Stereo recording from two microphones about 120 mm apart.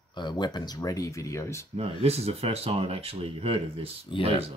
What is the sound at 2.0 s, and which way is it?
Speech, 60° right (ahead or behind).